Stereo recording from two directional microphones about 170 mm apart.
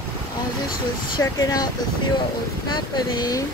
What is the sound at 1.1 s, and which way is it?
Speech, 20° left (ahead or behind).